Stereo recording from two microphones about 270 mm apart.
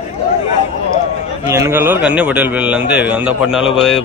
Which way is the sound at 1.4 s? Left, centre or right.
Centre.